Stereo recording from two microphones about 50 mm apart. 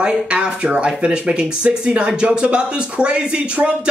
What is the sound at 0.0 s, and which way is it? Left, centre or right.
Speech, right.